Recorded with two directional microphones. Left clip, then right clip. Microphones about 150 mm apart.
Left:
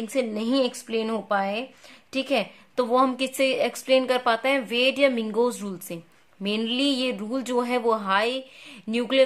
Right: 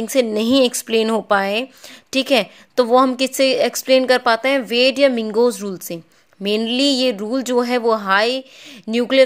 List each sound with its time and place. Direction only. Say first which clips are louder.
0.0 s speech: right 9 dB; 50° right (ahead or behind)